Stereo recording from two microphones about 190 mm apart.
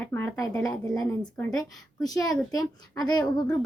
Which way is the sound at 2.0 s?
20° left (ahead or behind).